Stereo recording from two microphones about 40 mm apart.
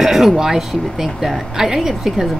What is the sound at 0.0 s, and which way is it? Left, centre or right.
Speech, centre.